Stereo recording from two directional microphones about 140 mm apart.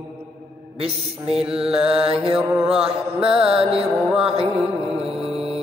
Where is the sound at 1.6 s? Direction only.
5° right (ahead or behind).